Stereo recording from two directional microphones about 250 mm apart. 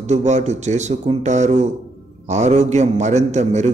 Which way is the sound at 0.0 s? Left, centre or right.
Right.